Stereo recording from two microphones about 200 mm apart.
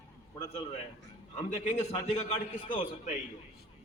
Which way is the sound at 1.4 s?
35° left (ahead or behind).